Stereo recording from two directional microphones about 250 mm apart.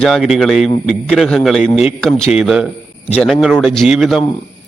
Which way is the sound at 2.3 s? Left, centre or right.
Centre.